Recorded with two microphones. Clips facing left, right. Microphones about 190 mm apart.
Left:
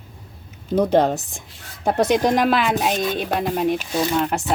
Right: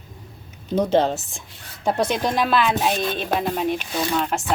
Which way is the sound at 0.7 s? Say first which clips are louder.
Left 2 dB; 10° left (ahead or behind).